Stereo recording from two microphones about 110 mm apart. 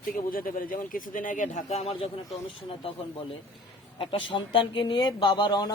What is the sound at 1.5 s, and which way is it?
Speech, 90° left.